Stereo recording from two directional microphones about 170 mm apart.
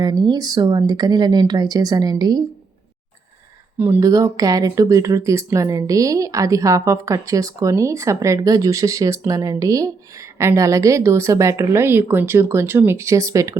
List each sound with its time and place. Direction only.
0.0 s speech: 25° right (ahead or behind)
3.8 s a woman's voice: 10° right (ahead or behind)